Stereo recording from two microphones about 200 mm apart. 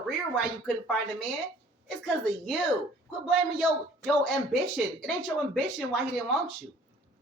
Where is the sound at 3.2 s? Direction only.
Centre (ahead or behind).